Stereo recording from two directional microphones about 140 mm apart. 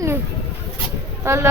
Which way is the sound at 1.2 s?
20° right (ahead or behind).